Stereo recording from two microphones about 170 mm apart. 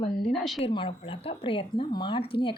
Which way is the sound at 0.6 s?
35° left (ahead or behind).